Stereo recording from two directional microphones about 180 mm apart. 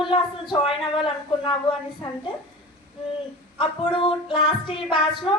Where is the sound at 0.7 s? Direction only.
30° left (ahead or behind).